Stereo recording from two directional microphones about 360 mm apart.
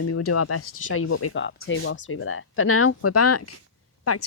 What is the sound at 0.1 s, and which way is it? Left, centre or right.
Speech, left.